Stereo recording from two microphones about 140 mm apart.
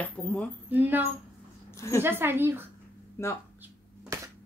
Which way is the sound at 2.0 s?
15° right (ahead or behind).